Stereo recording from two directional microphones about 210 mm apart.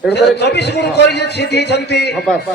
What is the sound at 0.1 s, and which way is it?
A man's voice, 55° left (ahead or behind).